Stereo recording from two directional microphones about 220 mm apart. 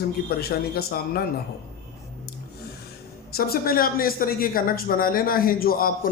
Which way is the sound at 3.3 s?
45° left (ahead or behind).